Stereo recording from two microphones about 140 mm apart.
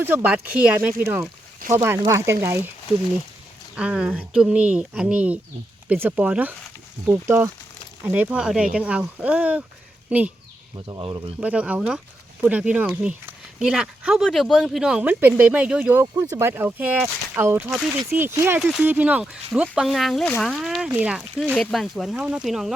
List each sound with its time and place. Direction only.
0.0 s speech: 15° right (ahead or behind)
3.8 s speech: 5° right (ahead or behind)
7.1 s speech: 20° right (ahead or behind)
10.8 s speech: 35° right (ahead or behind)
11.3 s speech: 10° right (ahead or behind)
17.7 s speech: centre (ahead or behind)
18.1 s speech: 15° right (ahead or behind)